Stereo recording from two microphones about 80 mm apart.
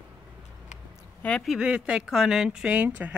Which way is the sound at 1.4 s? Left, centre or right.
Centre.